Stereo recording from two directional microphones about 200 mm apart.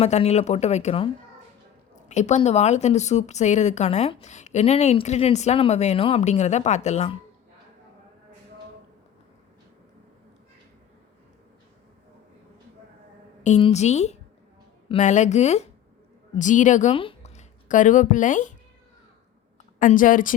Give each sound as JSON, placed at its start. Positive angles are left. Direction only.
{"t": 0.0, "sound": "a woman's voice", "side_deg": 30}
{"t": 13.4, "sound": "a woman's voice", "side_deg": 30}
{"t": 19.8, "sound": "a woman's voice", "side_deg": 45}